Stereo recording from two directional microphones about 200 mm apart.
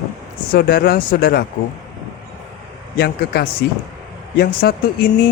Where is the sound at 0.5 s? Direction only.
50° left (ahead or behind).